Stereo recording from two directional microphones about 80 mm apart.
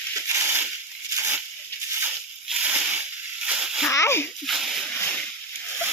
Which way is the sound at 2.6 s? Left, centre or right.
Centre.